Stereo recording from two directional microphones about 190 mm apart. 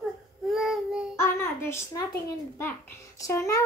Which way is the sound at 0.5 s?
Centre (ahead or behind).